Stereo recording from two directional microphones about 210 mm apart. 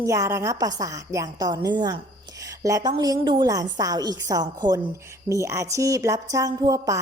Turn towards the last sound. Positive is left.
turn(degrees=-15)  # may be behind; listen again after turning